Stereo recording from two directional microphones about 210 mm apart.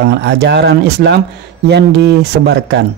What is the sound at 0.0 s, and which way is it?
Speech, 50° right (ahead or behind).